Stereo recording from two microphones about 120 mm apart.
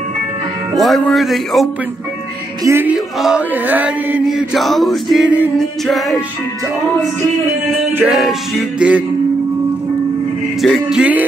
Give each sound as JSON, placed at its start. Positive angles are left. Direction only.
{"t": 0.7, "sound": "male singing", "side_deg": 0}
{"t": 2.6, "sound": "music", "side_deg": -20}
{"t": 2.9, "sound": "chant", "side_deg": -5}
{"t": 4.3, "sound": "male singing", "side_deg": 0}
{"t": 8.0, "sound": "male singing", "side_deg": -5}
{"t": 10.6, "sound": "chant", "side_deg": 0}